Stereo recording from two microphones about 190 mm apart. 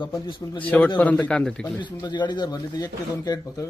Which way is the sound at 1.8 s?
25° left (ahead or behind).